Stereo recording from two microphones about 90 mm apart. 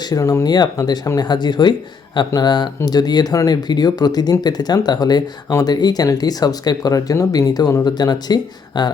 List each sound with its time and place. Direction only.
0.0 s speech: 45° left (ahead or behind)